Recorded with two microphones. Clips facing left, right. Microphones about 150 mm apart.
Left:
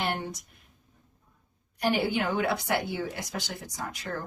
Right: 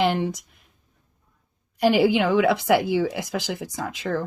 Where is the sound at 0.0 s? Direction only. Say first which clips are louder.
Right 9 dB; 90° right.